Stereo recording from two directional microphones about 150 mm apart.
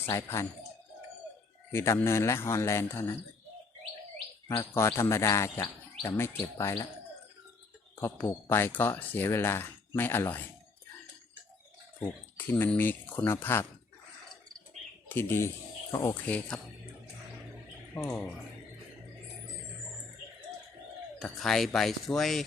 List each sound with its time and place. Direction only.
0.0 s speech: 20° left (ahead or behind)
1.7 s speech: 15° left (ahead or behind)
4.4 s speech: 20° left (ahead or behind)
8.0 s speech: 15° left (ahead or behind)
11.9 s speech: 15° left (ahead or behind)
15.1 s speech: 15° left (ahead or behind)
16.1 s speech: 10° left (ahead or behind)
17.9 s speech: 10° left (ahead or behind)
21.2 s speech: centre (ahead or behind)